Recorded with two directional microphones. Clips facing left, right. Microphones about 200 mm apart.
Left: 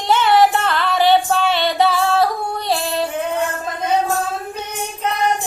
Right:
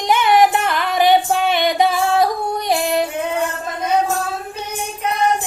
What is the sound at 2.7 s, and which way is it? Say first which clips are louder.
Music: right 3 dB; 15° right (ahead or behind).